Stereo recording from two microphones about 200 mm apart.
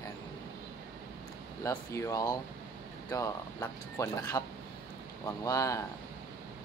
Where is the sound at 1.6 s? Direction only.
15° left (ahead or behind).